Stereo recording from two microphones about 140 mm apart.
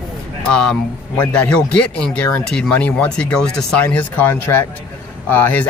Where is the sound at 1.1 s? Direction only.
10° left (ahead or behind).